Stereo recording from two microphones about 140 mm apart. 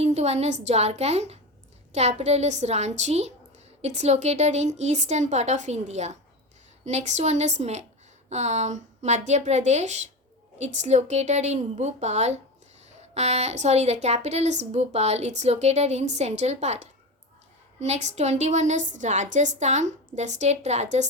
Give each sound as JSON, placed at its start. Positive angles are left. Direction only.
{"t": 0.0, "sound": "a woman's voice", "side_deg": -50}